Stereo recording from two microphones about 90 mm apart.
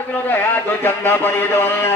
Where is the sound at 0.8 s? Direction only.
25° left (ahead or behind).